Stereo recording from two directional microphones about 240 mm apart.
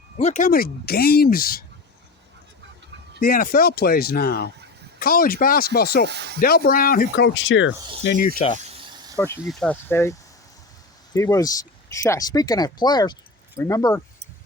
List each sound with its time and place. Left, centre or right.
0.2 s speech: left
3.2 s speech: left
6.1 s speech: right
6.4 s speech: left
8.5 s snake: right
9.1 s speech: centre